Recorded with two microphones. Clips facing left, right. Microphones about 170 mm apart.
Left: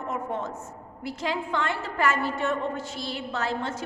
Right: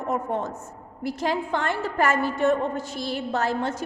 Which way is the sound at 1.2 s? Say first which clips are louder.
Right 2 dB; 45° right (ahead or behind).